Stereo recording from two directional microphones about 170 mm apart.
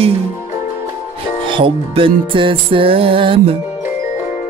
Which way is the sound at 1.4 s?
30° right (ahead or behind).